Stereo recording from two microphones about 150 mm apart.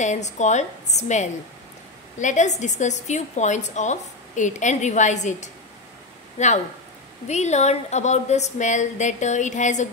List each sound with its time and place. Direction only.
0.0 s a woman's voice: 50° left (ahead or behind)